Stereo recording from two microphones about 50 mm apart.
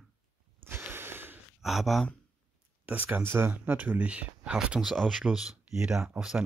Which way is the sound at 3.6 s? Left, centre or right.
Right.